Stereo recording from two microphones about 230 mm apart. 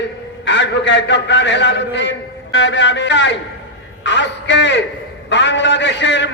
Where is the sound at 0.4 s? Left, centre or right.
Left.